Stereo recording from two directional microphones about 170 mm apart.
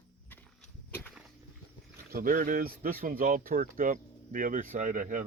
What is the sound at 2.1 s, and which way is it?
Speech, 55° right (ahead or behind).